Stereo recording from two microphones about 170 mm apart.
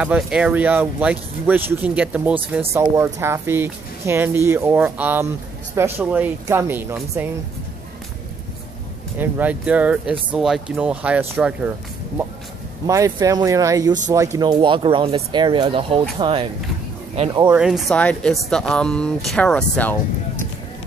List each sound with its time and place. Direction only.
0.0 s speech: 5° right (ahead or behind)
9.2 s speech: 10° right (ahead or behind)
12.8 s speech: 20° right (ahead or behind); by 17.5 s 35° right (ahead or behind)
17.6 s speech: centre (ahead or behind)